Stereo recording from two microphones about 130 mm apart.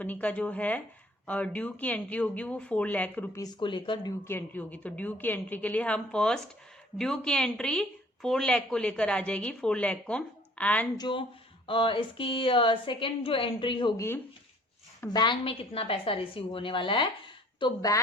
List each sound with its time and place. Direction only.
0.0 s speech: 10° left (ahead or behind)
3.6 s speech: 40° left (ahead or behind)
4.2 s speech: 20° left (ahead or behind)
10.9 s speech: 35° left (ahead or behind)
13.9 s speech: 20° left (ahead or behind)
15.1 s speech: 35° left (ahead or behind)